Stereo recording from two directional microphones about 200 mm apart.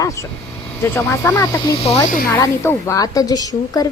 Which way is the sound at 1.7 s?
30° left (ahead or behind).